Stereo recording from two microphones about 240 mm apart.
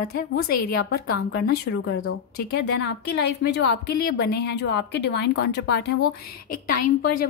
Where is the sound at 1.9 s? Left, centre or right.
Left.